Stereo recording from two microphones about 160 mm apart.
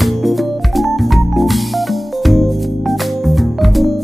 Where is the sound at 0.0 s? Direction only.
Centre (ahead or behind).